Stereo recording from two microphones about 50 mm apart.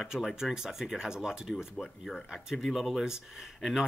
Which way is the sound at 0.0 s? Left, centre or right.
Centre.